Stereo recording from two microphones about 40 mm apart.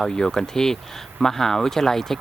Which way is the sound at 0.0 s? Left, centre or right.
Centre.